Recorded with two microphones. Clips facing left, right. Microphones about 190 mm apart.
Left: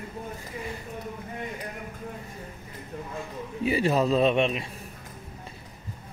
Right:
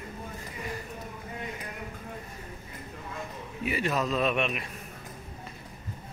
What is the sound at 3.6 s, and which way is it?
Speech, 30° left (ahead or behind).